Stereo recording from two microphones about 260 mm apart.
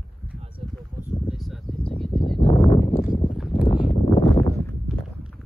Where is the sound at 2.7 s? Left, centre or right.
Left.